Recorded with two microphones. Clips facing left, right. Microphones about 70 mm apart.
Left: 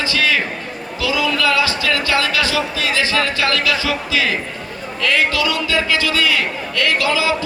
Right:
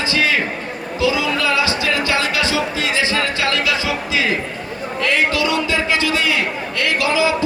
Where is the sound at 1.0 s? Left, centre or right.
Right.